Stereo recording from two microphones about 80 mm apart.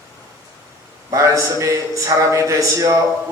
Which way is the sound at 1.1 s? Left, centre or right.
Right.